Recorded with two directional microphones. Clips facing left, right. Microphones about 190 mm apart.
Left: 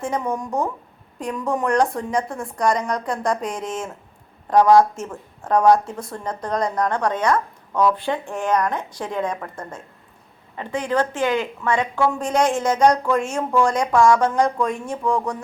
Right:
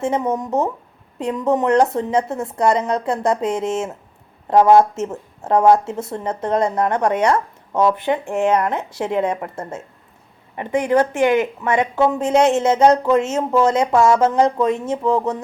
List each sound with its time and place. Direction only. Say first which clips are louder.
0.0 s a woman's voice: right 4 dB; 25° right (ahead or behind)
10.6 s a woman's voice: right 5 dB; 10° right (ahead or behind)